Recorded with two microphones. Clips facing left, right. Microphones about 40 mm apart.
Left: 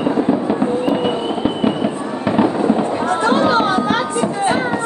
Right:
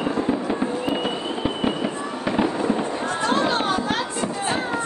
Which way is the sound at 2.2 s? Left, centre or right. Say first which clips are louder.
Left 7 dB; centre.